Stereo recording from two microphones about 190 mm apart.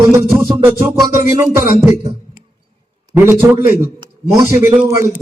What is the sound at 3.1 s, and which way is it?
Speech, 15° right (ahead or behind).